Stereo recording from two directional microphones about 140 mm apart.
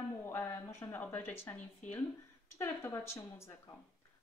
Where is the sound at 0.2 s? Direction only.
15° left (ahead or behind).